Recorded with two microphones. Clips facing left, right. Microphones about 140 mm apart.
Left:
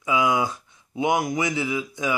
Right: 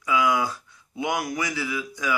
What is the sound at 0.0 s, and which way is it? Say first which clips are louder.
Speech: left 1 dB; 20° left (ahead or behind).